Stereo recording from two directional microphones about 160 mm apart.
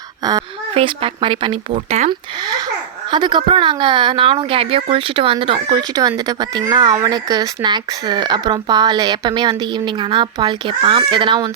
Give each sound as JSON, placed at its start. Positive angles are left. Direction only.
{"t": 0.7, "sound": "speech", "side_deg": -35}